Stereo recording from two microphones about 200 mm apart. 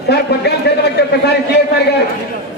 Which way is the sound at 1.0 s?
60° left (ahead or behind).